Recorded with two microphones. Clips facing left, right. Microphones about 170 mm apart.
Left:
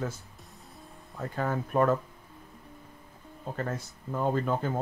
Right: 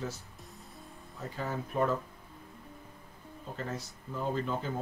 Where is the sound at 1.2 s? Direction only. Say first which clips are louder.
Left 6 dB; 55° left (ahead or behind).